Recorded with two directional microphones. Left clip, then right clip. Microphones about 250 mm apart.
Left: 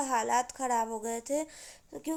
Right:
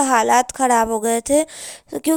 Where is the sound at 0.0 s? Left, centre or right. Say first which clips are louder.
Right 14 dB; right.